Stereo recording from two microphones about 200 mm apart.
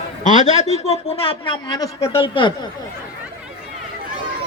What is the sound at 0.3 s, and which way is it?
Speech, 35° left (ahead or behind).